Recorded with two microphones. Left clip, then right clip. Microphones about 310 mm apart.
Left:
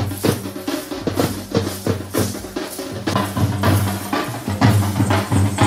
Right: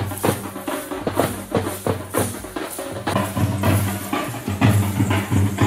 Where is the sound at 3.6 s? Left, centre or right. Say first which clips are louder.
Left 3 dB; centre.